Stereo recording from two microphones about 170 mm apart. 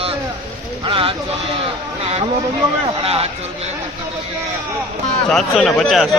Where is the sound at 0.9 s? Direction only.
30° right (ahead or behind).